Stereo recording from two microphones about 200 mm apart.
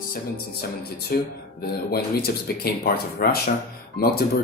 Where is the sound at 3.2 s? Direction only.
50° left (ahead or behind).